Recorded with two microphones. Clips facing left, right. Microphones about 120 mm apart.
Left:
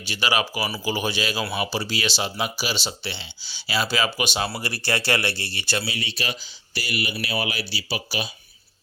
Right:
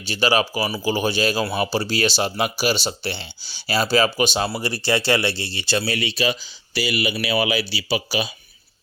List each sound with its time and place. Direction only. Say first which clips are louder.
0.1 s speech: right 5 dB; 30° right (ahead or behind)
4.6 s speech: right 5 dB; 20° right (ahead or behind)
6.0 s speech: right 8 dB; 90° right